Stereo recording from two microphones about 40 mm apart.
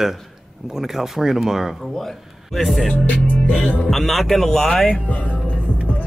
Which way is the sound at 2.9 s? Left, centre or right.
Left.